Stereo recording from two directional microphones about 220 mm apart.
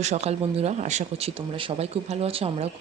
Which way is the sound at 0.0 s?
30° right (ahead or behind).